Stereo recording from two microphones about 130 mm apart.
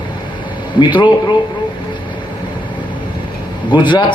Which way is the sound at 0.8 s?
40° left (ahead or behind).